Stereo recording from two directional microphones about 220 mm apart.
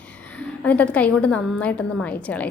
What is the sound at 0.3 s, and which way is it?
A woman's voice, 5° left (ahead or behind).